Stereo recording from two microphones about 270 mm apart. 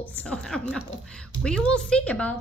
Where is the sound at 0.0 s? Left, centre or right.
Centre.